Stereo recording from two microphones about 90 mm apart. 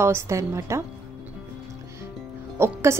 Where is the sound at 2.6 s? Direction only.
30° right (ahead or behind).